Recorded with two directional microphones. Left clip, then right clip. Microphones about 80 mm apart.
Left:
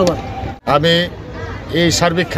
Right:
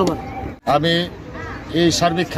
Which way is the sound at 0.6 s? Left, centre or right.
Left.